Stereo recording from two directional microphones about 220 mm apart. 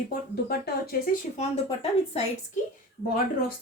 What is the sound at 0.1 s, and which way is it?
Speech, 45° left (ahead or behind).